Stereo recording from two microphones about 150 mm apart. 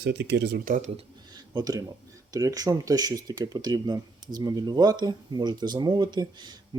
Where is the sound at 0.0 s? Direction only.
90° right.